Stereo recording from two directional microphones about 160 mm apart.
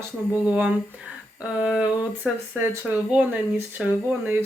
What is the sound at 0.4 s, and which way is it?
Speech, 10° right (ahead or behind).